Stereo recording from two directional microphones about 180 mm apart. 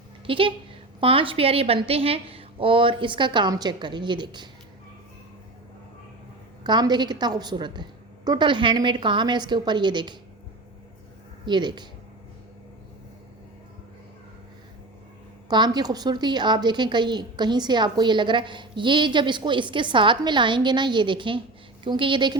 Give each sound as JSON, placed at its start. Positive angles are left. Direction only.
{"t": 0.3, "sound": "a woman's voice", "side_deg": -30}
{"t": 6.7, "sound": "a woman's voice", "side_deg": -25}
{"t": 11.4, "sound": "a woman's voice", "side_deg": -25}
{"t": 15.4, "sound": "a woman's voice", "side_deg": -25}